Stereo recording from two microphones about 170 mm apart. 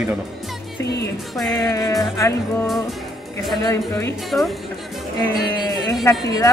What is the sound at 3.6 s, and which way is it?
Music, 15° left (ahead or behind).